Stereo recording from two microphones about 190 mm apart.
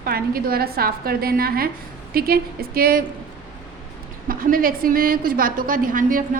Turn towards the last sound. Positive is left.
turn(degrees=-45)  # may be behind; listen again after turning